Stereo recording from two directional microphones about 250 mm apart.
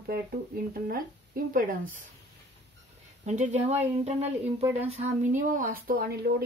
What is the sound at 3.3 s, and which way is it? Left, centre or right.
Speech, right.